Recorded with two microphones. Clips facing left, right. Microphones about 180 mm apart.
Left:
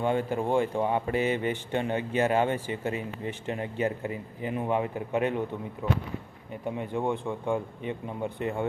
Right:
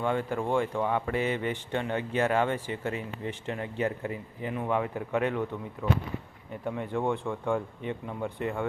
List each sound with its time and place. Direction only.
0.0 s speech: 25° left (ahead or behind)